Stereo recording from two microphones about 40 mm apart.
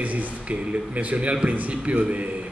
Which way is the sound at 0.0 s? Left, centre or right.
Right.